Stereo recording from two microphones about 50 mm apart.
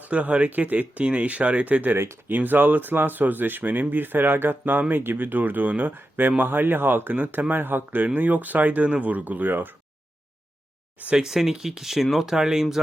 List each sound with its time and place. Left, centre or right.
0.0 s speech: right
11.2 s speech: centre